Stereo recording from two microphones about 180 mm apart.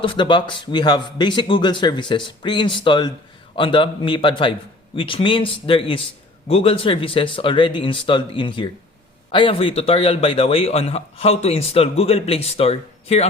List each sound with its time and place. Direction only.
0.0 s a man's voice: 25° left (ahead or behind)